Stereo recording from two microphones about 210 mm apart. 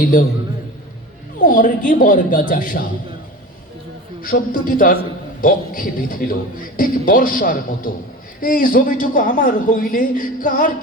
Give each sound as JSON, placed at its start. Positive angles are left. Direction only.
{"t": 0.0, "sound": "a man's voice", "side_deg": 40}
{"t": 1.4, "sound": "a man's voice", "side_deg": 40}
{"t": 4.2, "sound": "a man's voice", "side_deg": 40}